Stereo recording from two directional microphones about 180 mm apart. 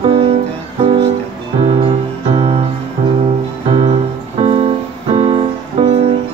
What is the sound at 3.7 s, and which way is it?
Music, 30° right (ahead or behind).